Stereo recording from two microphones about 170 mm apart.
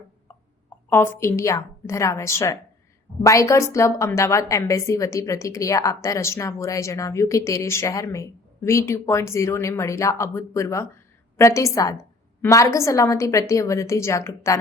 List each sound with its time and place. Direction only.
0.9 s a woman's voice: 15° left (ahead or behind)